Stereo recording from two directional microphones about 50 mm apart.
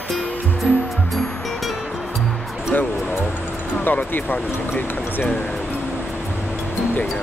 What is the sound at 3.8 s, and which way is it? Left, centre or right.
Speech, left.